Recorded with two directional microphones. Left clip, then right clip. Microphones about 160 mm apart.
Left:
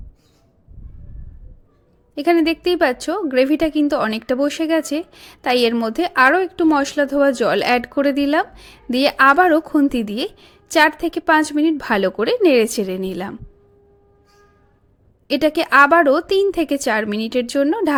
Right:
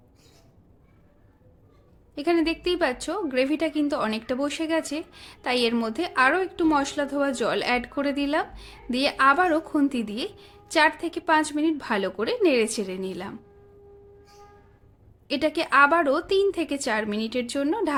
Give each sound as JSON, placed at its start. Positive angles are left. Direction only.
{"t": 2.1, "sound": "a woman's voice", "side_deg": 35}
{"t": 15.3, "sound": "a woman's voice", "side_deg": 35}